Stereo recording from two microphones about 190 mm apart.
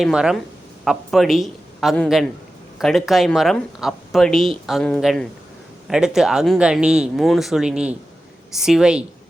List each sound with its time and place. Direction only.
0.0 s speech: 5° right (ahead or behind)